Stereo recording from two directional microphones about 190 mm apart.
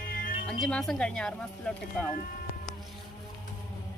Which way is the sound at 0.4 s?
5° left (ahead or behind).